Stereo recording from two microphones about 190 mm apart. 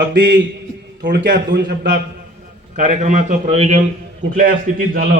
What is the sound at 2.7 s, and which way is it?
A man's voice, 40° right (ahead or behind).